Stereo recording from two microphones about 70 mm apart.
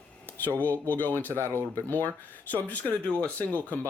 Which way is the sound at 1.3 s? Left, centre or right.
Right.